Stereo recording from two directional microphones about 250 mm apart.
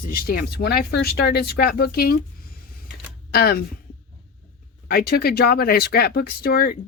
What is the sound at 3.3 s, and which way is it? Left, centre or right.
Speech, left.